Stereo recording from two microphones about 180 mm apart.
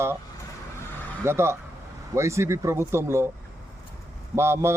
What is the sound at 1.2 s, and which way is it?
A man's voice, 15° right (ahead or behind).